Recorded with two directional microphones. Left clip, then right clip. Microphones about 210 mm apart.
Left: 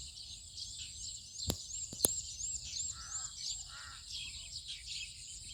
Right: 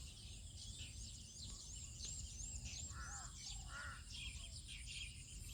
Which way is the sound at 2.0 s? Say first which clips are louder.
Left 16 dB; 80° right.